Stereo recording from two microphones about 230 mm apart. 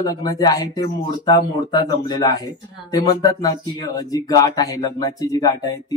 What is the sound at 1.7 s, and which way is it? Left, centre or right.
Speech, centre.